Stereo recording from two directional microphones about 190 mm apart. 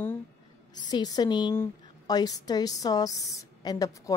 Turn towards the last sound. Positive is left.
turn(degrees=20)  # may be behind; listen again after turning